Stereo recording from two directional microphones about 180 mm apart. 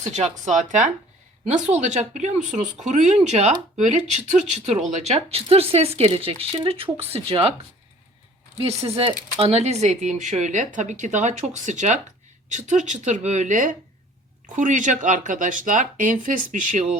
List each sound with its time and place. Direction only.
0.0 s speech: 40° right (ahead or behind)
9.0 s speech: 30° right (ahead or behind)